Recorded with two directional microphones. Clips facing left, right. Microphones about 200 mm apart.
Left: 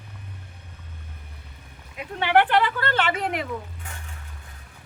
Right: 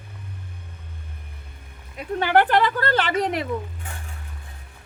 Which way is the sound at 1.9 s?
40° right (ahead or behind).